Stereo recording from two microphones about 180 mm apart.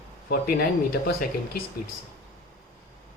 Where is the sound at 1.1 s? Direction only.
60° left (ahead or behind).